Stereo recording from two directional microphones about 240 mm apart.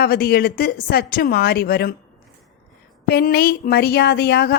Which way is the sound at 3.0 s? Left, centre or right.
Left.